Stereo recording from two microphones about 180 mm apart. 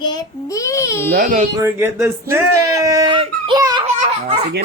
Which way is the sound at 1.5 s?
15° right (ahead or behind).